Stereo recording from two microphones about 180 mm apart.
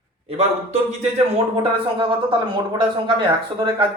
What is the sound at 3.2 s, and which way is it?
Speech, 25° right (ahead or behind).